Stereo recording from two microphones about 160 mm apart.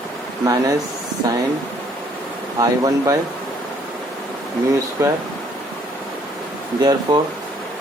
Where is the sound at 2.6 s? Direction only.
20° right (ahead or behind).